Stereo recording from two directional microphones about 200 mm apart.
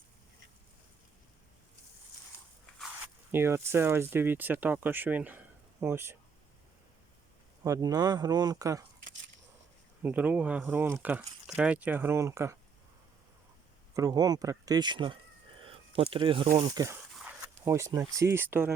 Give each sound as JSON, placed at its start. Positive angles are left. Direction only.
{"t": 2.7, "sound": "speech", "side_deg": -5}
{"t": 7.6, "sound": "speech", "side_deg": -15}
{"t": 10.0, "sound": "speech", "side_deg": -10}
{"t": 13.9, "sound": "speech", "side_deg": -20}
{"t": 15.6, "sound": "a sound", "side_deg": -30}
{"t": 16.5, "sound": "speech", "side_deg": -25}
{"t": 17.2, "sound": "speech", "side_deg": -5}